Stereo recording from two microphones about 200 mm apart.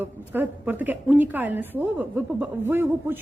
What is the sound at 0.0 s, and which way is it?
A man's voice, 10° right (ahead or behind).